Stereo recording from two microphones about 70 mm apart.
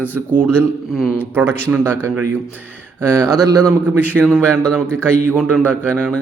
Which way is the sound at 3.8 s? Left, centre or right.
Right.